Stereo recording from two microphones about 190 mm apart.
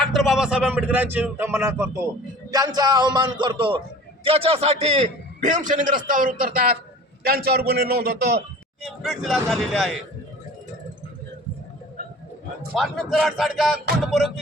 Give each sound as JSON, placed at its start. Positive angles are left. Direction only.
{"t": 0.0, "sound": "a man's voice", "side_deg": 0}
{"t": 8.8, "sound": "speech", "side_deg": 0}
{"t": 12.7, "sound": "speech", "side_deg": 0}